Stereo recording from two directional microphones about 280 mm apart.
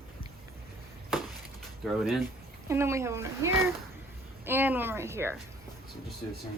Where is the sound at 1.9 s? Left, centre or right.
Centre.